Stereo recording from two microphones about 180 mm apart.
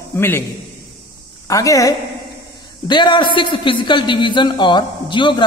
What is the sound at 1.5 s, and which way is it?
A man's voice, 20° left (ahead or behind).